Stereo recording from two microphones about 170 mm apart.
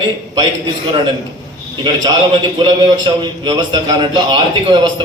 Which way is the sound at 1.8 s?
25° right (ahead or behind).